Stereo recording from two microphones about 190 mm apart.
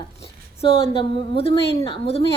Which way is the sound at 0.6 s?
30° left (ahead or behind).